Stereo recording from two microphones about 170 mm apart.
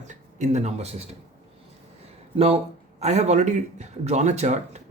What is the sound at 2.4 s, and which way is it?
Speech, 35° right (ahead or behind).